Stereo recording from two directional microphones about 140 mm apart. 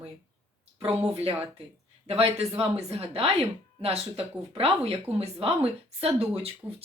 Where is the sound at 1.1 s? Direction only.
45° right (ahead or behind).